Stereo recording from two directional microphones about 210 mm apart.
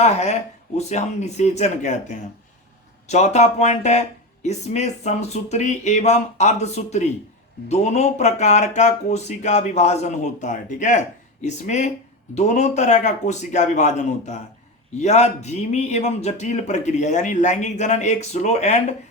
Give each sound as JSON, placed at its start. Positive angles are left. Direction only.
{"t": 0.0, "sound": "speech", "side_deg": 30}